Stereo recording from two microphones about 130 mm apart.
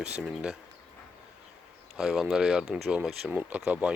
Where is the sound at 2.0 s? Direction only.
5° right (ahead or behind).